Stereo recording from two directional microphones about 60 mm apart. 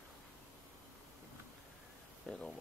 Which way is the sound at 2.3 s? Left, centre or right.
Centre.